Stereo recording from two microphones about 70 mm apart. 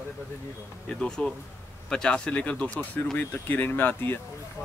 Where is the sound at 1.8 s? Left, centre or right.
Centre; by 4.2 s left.